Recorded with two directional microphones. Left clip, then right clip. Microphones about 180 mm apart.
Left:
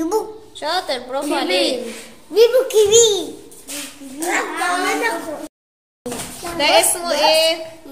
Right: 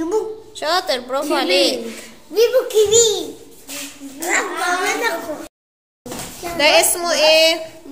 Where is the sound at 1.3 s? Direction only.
30° right (ahead or behind).